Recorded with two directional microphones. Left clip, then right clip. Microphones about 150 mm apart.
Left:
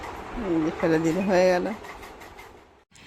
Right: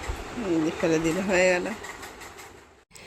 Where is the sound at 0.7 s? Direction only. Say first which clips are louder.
Left 3 dB; 10° left (ahead or behind).